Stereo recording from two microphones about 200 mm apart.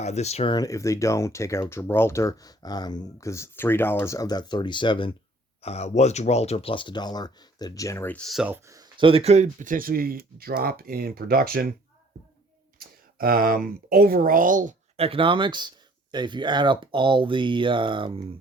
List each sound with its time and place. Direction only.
0.0 s speech: 35° left (ahead or behind); by 11.7 s 50° right (ahead or behind)
12.8 s speech: 45° right (ahead or behind); by 18.2 s 25° right (ahead or behind)